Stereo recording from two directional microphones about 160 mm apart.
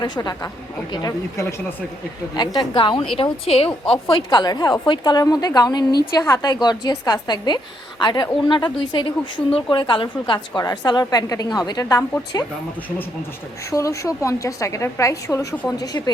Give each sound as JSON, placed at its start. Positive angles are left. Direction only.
{"t": 0.0, "sound": "a woman's voice", "side_deg": 25}
{"t": 13.7, "sound": "a woman's voice", "side_deg": 20}